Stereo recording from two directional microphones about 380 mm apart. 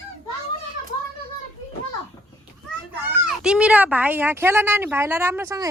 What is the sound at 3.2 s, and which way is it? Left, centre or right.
Speech, centre.